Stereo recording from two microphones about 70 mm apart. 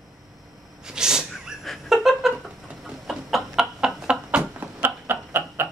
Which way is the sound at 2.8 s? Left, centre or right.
Centre.